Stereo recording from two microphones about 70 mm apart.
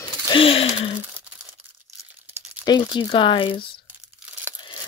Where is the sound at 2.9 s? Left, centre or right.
Left.